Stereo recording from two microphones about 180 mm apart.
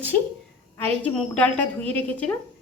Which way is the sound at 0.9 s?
10° left (ahead or behind).